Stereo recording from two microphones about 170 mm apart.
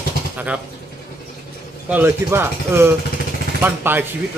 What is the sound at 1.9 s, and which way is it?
Speech, 10° right (ahead or behind).